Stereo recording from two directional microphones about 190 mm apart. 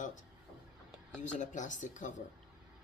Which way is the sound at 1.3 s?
40° left (ahead or behind).